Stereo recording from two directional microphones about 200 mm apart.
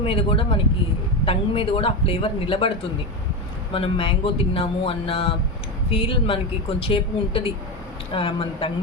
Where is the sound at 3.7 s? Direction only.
25° left (ahead or behind).